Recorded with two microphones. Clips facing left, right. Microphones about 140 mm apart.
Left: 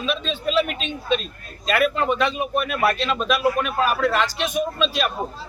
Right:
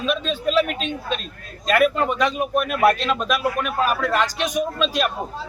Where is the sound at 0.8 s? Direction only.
45° right (ahead or behind).